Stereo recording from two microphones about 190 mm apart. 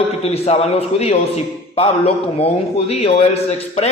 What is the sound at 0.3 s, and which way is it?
A man's voice, 35° left (ahead or behind).